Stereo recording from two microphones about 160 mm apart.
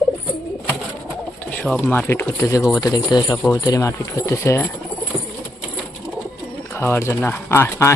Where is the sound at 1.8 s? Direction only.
15° left (ahead or behind).